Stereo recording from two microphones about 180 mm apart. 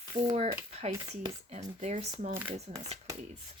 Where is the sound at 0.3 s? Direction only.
35° right (ahead or behind).